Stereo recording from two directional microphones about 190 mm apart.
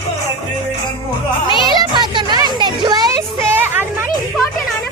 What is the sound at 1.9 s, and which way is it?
Music, 25° right (ahead or behind).